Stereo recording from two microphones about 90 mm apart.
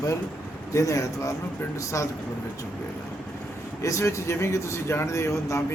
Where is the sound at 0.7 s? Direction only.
35° left (ahead or behind).